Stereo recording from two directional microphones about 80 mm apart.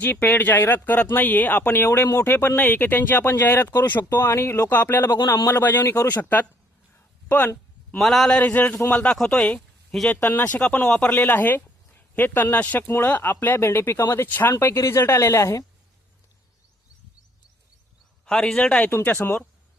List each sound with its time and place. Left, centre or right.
0.0 s speech: left
7.9 s a man's voice: centre
8.3 s a man's voice: centre
9.6 s a sound: centre
10.1 s a man's voice: left
11.1 s a woman's voice: left
18.3 s a man's voice: centre
19.0 s speech: left